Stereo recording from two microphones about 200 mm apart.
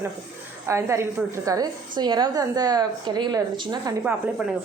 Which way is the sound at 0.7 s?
15° right (ahead or behind).